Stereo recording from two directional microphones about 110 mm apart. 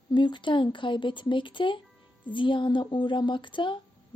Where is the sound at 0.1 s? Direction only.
45° left (ahead or behind).